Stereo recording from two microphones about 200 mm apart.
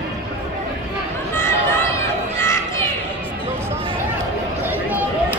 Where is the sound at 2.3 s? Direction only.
10° left (ahead or behind).